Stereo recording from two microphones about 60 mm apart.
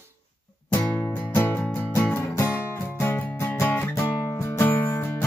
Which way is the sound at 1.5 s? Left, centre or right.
Left.